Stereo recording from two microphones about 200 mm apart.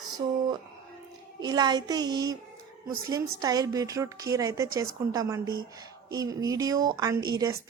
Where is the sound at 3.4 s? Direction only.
20° right (ahead or behind).